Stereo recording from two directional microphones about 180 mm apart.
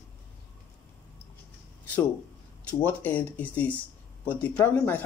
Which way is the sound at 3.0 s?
10° left (ahead or behind).